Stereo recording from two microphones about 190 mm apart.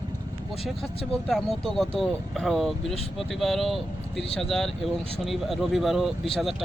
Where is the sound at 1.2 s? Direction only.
Centre (ahead or behind).